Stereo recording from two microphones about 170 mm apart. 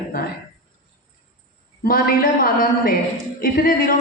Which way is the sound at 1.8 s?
60° left (ahead or behind).